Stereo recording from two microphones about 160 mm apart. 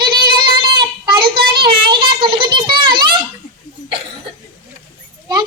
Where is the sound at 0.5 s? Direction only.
30° right (ahead or behind).